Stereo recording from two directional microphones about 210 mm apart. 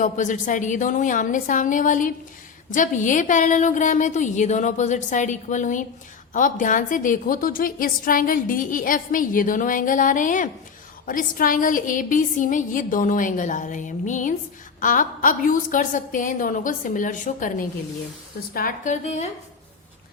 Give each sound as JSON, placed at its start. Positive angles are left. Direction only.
{"t": 0.0, "sound": "a woman's voice", "side_deg": 35}